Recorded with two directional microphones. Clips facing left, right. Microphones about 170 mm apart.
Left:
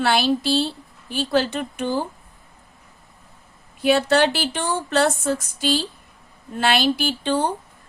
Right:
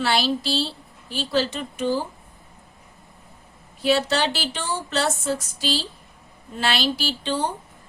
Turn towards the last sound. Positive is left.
turn(degrees=55)  # may be behind; listen again after turning